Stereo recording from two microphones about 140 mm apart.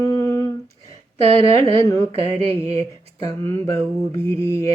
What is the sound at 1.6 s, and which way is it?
Mantra, 20° left (ahead or behind).